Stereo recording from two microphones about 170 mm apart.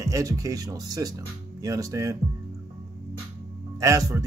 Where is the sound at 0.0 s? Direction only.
20° right (ahead or behind).